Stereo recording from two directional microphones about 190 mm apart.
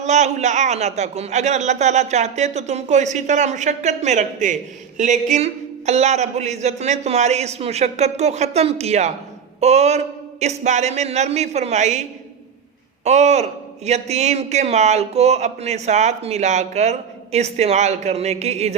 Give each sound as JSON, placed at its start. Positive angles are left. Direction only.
{"t": 0.0, "sound": "speech", "side_deg": -40}
{"t": 9.6, "sound": "a sound", "side_deg": -35}
{"t": 10.6, "sound": "speech", "side_deg": -35}
{"t": 13.1, "sound": "speech", "side_deg": -35}